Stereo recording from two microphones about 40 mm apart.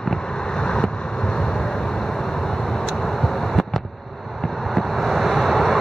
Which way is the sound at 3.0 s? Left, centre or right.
Centre.